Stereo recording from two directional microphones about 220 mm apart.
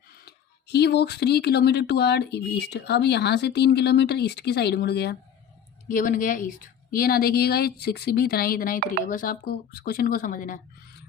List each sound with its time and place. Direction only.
0.3 s speech: 50° left (ahead or behind)
5.9 s speech: 35° left (ahead or behind)